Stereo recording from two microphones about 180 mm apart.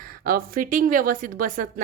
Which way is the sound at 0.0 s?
55° right (ahead or behind).